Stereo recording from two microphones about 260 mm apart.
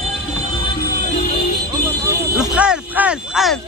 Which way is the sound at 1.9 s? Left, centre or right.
Centre.